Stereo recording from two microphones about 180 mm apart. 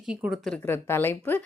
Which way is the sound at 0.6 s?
15° left (ahead or behind).